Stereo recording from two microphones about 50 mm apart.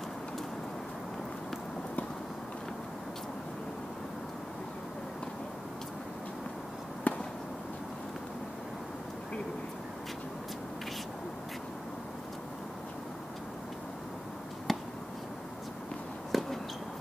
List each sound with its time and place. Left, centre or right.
7.1 s fireworks: left
14.7 s chop: centre
16.3 s a sound: centre